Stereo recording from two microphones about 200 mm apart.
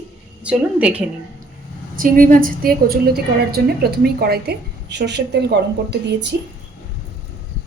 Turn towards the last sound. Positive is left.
turn(degrees=-55)  # may be behind; listen again after turning